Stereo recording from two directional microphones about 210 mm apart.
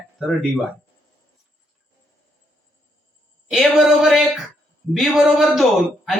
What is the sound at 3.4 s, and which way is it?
Speech, centre (ahead or behind).